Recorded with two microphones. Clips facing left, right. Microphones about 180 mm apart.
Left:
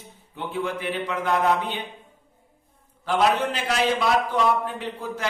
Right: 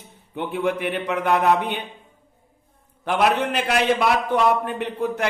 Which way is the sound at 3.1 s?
65° right (ahead or behind).